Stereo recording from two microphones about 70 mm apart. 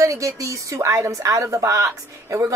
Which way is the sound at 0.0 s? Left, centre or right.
Right.